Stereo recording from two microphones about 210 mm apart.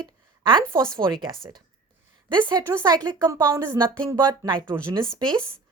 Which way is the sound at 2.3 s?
20° right (ahead or behind).